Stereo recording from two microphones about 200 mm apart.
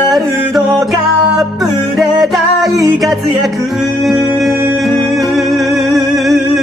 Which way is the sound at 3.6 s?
Centre (ahead or behind).